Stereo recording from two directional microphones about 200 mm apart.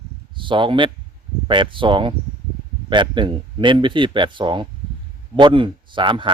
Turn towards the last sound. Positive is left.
turn(degrees=-25)  # may be behind; listen again after turning